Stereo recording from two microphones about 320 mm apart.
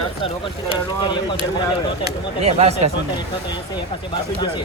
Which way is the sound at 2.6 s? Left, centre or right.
Centre.